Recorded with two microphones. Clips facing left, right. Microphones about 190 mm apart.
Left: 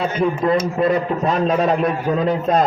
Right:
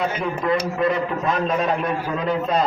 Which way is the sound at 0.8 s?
35° left (ahead or behind).